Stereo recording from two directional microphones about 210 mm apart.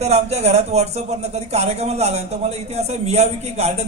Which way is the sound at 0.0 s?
30° right (ahead or behind).